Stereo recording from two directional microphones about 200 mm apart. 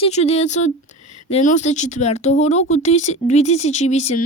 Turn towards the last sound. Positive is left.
turn(degrees=35)  # may be behind; listen again after turning